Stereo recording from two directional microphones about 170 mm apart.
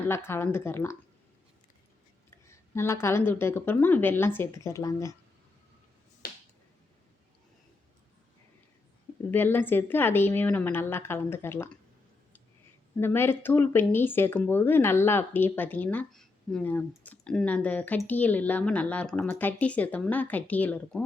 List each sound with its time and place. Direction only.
0.1 s speech: 15° left (ahead or behind)
2.5 s speech: 15° left (ahead or behind)
6.2 s finger snapping: 60° left (ahead or behind)
9.3 s speech: 10° left (ahead or behind)
13.0 s speech: 15° left (ahead or behind)